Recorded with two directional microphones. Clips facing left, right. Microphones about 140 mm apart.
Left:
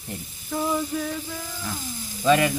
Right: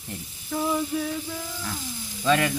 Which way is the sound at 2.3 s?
10° left (ahead or behind).